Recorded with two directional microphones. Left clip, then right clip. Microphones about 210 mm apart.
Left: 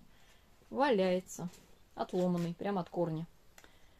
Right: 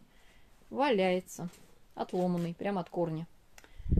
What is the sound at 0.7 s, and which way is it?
Speech, 10° right (ahead or behind).